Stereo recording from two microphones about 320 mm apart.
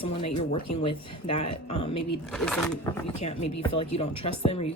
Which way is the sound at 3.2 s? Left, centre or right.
Left.